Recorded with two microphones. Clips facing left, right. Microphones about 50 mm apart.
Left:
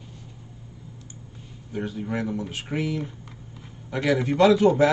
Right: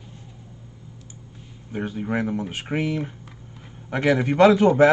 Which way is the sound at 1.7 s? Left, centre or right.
Right.